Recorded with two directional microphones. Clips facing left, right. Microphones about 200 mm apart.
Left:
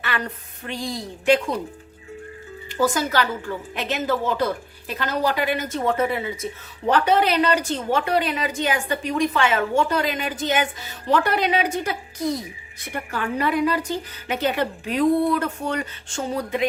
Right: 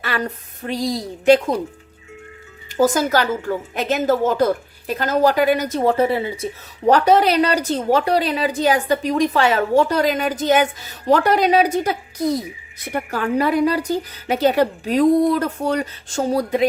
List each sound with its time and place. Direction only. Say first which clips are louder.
0.6 s a woman's voice: right 7 dB; 40° right (ahead or behind)
2.7 s a woman's voice: right 5 dB; 45° right (ahead or behind)